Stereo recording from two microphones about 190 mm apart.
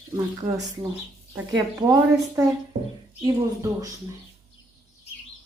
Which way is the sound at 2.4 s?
15° right (ahead or behind).